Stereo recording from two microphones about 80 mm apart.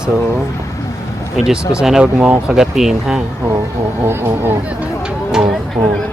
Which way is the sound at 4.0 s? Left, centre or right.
Right.